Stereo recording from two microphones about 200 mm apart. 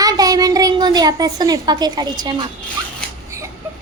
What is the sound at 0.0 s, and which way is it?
A woman's voice, 20° right (ahead or behind).